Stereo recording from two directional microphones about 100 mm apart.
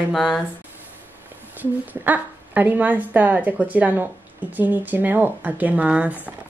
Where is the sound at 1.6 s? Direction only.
15° right (ahead or behind).